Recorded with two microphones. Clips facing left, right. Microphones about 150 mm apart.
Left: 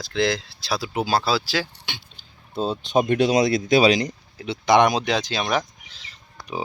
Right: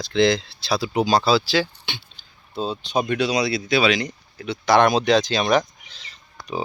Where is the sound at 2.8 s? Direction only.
50° left (ahead or behind).